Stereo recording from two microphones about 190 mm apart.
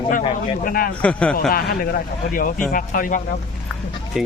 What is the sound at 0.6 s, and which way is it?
Speech, 50° left (ahead or behind).